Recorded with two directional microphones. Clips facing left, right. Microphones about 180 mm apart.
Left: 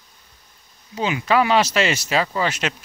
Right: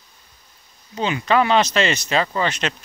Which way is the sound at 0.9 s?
10° left (ahead or behind).